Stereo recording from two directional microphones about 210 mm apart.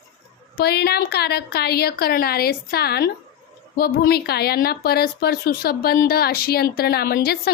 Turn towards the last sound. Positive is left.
turn(degrees=50)  # may be behind; listen again after turning